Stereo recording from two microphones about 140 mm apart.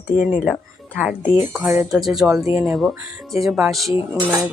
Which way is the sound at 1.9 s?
Centre (ahead or behind).